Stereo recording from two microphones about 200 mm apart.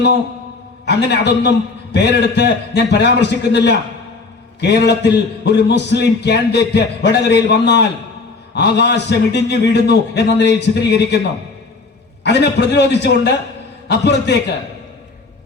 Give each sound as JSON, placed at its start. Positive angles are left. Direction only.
{"t": 0.9, "sound": "a man's voice", "side_deg": 60}
{"t": 12.2, "sound": "a man's voice", "side_deg": 60}